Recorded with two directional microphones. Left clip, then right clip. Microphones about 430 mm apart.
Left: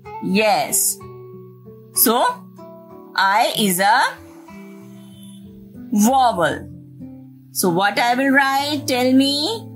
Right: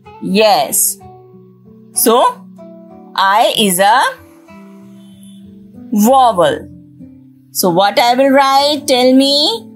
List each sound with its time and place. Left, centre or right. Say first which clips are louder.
0.5 s speech: right 5 dB; centre
2.0 s speech: right 7 dB; centre
5.9 s speech: right 6 dB; centre